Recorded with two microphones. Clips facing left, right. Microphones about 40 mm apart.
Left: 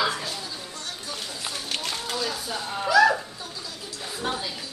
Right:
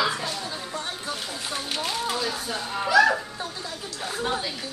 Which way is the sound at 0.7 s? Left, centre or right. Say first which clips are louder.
Right 5 dB; right.